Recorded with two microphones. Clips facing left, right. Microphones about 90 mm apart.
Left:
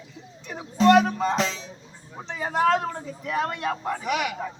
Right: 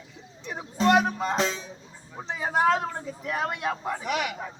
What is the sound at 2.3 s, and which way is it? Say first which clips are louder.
A man's voice: left 1 dB; 10° right (ahead or behind).